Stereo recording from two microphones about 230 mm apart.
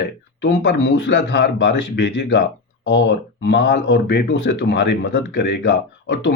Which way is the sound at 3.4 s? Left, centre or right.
Left.